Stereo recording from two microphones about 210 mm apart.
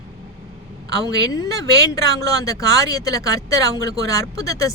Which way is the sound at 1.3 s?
15° left (ahead or behind).